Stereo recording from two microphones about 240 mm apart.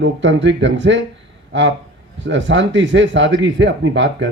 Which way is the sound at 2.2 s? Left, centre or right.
Right.